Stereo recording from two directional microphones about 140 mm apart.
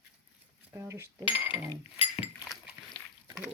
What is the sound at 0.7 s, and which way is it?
Speech, 20° right (ahead or behind).